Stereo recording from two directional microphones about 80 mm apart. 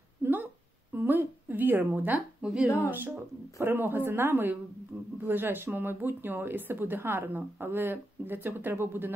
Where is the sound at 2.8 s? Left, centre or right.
Right.